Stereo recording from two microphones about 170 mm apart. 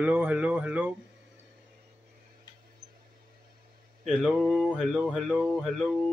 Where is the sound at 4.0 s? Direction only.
Centre (ahead or behind).